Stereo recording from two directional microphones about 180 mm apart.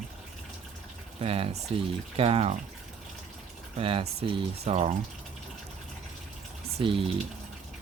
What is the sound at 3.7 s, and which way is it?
Speech, 30° right (ahead or behind).